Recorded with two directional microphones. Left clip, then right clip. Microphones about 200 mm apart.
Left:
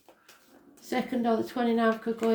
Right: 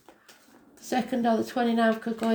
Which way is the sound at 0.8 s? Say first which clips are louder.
Right 3 dB; 35° right (ahead or behind).